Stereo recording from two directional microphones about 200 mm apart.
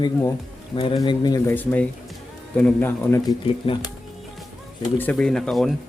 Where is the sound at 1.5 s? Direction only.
10° left (ahead or behind).